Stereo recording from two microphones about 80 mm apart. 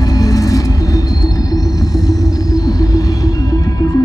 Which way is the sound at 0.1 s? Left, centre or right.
Left.